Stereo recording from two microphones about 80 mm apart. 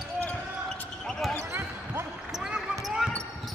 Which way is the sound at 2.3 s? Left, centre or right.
Centre.